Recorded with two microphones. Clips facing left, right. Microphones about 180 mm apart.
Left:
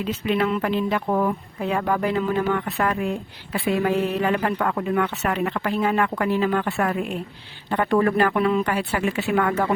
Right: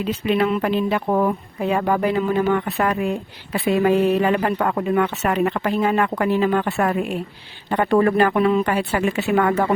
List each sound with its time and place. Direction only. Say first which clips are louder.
0.3 s speech: right 3 dB; 20° right (ahead or behind)